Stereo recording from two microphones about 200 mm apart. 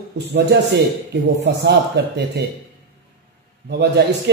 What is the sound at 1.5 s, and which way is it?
Speech, 55° right (ahead or behind).